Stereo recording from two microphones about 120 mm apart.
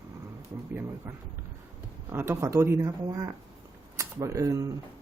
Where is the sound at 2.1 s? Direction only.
20° right (ahead or behind).